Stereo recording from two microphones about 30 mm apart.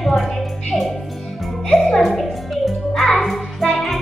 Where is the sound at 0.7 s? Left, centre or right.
Centre.